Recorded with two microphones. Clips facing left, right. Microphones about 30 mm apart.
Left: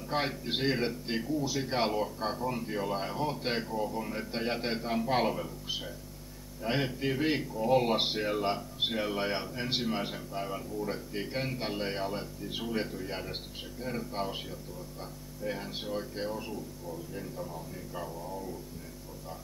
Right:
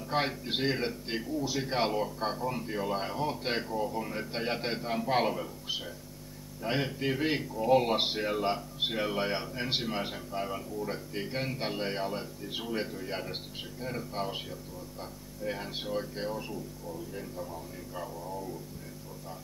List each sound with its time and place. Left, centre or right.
0.0 s a man's voice: centre